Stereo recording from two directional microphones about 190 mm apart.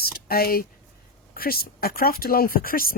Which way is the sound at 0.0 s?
50° left (ahead or behind).